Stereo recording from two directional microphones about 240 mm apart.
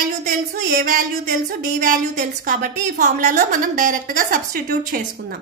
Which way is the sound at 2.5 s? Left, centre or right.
Right.